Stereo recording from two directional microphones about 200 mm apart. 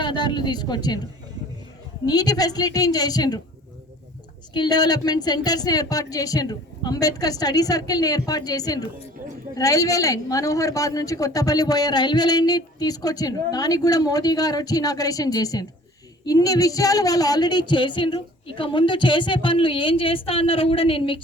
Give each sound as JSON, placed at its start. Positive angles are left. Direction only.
{"t": 0.0, "sound": "speech", "side_deg": 20}
{"t": 2.0, "sound": "speech", "side_deg": 20}
{"t": 4.5, "sound": "speech", "side_deg": 20}